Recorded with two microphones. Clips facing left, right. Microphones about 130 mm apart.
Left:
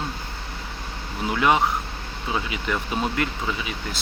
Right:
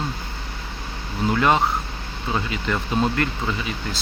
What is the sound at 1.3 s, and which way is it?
Speech, 10° left (ahead or behind).